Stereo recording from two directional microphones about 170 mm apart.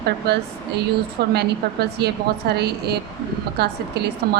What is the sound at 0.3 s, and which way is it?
Speech, 75° right (ahead or behind).